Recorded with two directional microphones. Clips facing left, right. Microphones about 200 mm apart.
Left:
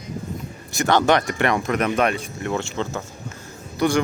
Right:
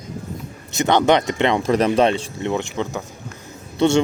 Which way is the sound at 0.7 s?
20° right (ahead or behind).